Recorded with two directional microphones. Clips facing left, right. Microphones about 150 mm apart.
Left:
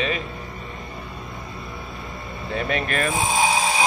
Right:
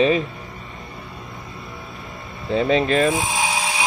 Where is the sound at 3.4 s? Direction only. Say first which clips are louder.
Left 3 dB; 25° left (ahead or behind).